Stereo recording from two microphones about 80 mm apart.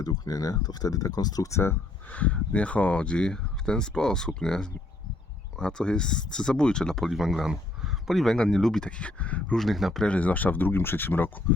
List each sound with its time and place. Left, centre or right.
0.0 s speech: left
2.0 s speech: centre
9.6 s speech: centre
10.1 s speech: centre